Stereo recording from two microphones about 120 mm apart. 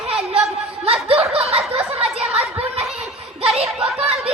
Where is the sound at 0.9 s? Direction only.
55° right (ahead or behind).